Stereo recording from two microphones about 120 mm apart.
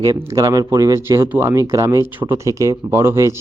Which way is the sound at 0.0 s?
30° right (ahead or behind).